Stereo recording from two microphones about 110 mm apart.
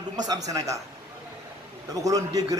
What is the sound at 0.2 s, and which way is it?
Speech, 35° right (ahead or behind).